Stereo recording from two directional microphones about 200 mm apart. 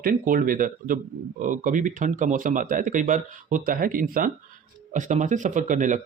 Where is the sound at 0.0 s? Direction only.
45° right (ahead or behind).